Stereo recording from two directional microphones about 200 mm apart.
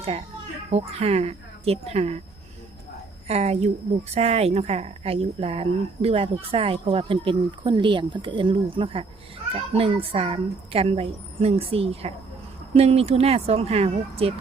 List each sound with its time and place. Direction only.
0.7 s speech: 30° right (ahead or behind)
3.2 s speech: 30° right (ahead or behind)